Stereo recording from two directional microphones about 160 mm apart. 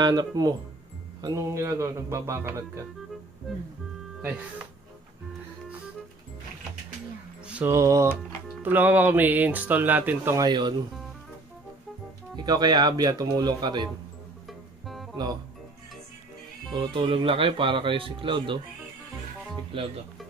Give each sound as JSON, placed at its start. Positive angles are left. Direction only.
{"t": 0.0, "sound": "speech", "side_deg": -25}
{"t": 7.4, "sound": "speech", "side_deg": -10}
{"t": 10.4, "sound": "speech", "side_deg": -25}
{"t": 12.4, "sound": "speech", "side_deg": -25}
{"t": 16.7, "sound": "speech", "side_deg": -30}
{"t": 19.7, "sound": "speech", "side_deg": -35}